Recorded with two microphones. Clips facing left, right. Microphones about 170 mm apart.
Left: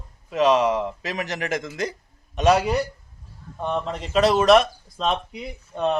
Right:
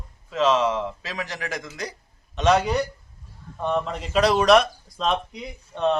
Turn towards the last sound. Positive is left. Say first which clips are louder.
# left 2 dB
turn(degrees=5)  # may be behind; listen again after turning